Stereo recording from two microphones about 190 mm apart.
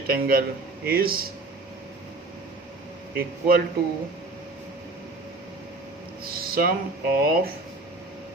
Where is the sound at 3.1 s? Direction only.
50° right (ahead or behind).